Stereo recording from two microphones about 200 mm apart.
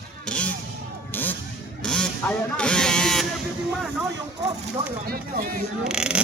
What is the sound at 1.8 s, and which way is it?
Speech, 5° left (ahead or behind).